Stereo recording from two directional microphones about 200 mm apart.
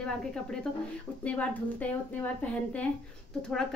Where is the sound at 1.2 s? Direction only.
5° left (ahead or behind).